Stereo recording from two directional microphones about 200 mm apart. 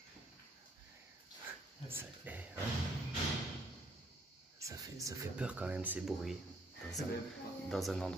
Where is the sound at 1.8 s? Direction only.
10° right (ahead or behind).